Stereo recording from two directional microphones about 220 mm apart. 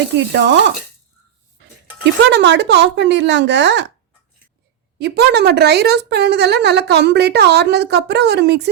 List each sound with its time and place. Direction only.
0.2 s a woman's voice: 55° right (ahead or behind)
2.2 s a woman's voice: 50° right (ahead or behind)
4.9 s a woman's voice: 50° right (ahead or behind)